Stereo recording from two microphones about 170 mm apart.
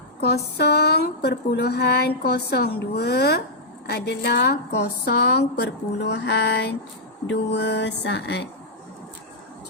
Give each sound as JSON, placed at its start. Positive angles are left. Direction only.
{"t": 0.2, "sound": "a sound", "side_deg": 70}
{"t": 3.8, "sound": "a woman's voice", "side_deg": 70}
{"t": 7.3, "sound": "music", "side_deg": 90}